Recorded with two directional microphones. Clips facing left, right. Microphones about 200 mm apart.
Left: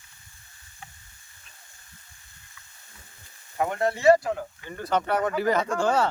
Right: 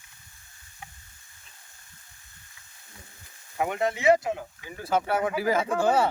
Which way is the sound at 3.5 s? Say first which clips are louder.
Left 1 dB; 15° right (ahead or behind).